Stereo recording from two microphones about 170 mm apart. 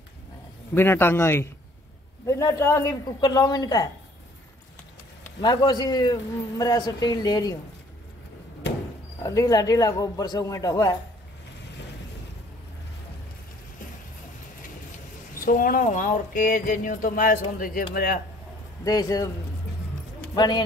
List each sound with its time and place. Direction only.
0.7 s a man's voice: 15° left (ahead or behind)
5.4 s a man's voice: 25° left (ahead or behind)
9.2 s a man's voice: 20° left (ahead or behind)
15.4 s speech: 55° left (ahead or behind)
18.9 s a man's voice: 20° left (ahead or behind)
20.3 s a man's voice: 25° left (ahead or behind)